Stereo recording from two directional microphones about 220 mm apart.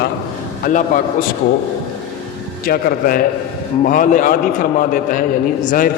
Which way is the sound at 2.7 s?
40° left (ahead or behind).